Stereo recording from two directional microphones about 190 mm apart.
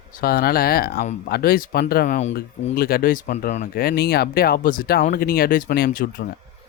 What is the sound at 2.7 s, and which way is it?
Speech, 55° left (ahead or behind).